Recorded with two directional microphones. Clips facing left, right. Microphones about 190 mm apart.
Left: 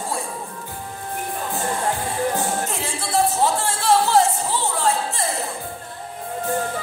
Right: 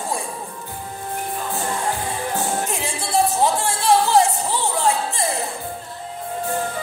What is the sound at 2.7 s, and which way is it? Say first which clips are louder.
Music: right 1 dB; 15° right (ahead or behind).